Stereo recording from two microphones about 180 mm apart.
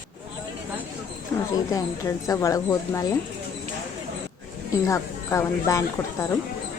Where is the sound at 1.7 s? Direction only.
20° left (ahead or behind).